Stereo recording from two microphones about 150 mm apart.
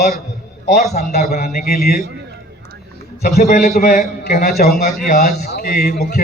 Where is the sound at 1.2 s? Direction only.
90° left.